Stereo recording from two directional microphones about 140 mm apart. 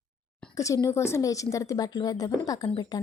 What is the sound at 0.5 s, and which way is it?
A woman's voice, 25° left (ahead or behind).